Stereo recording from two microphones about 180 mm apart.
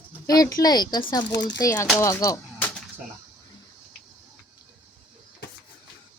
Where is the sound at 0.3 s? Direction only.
20° left (ahead or behind).